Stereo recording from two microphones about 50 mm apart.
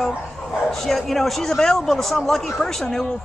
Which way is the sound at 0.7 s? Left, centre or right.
Centre.